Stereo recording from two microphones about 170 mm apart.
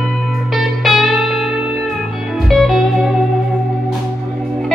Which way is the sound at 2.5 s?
Centre (ahead or behind).